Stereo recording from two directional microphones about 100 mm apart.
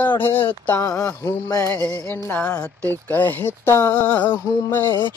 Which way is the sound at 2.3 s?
15° left (ahead or behind).